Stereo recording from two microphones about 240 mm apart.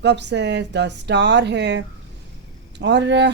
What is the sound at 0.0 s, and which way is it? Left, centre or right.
Speech, right.